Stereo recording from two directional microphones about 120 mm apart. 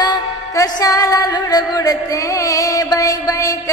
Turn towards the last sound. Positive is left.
turn(degrees=30)  # may be behind; listen again after turning